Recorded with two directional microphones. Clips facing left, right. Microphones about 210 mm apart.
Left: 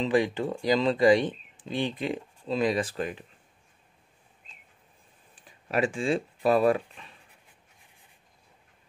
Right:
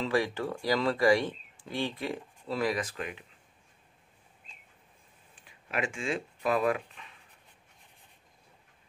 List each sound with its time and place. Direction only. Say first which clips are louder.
0.0 s speech: left 4 dB; 20° left (ahead or behind)
2.8 s speech: left 6 dB; 35° left (ahead or behind)
5.3 s speech: left 6 dB; 35° left (ahead or behind)